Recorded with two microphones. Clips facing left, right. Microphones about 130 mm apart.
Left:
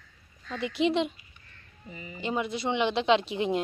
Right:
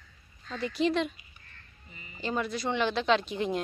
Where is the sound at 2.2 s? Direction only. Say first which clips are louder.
Left 1 dB; 20° left (ahead or behind).